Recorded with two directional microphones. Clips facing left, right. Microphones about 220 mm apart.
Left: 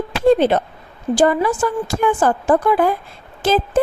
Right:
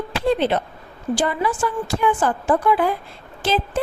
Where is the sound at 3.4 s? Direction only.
45° left (ahead or behind).